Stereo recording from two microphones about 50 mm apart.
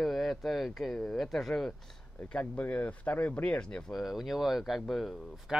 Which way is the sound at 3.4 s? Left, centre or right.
Centre.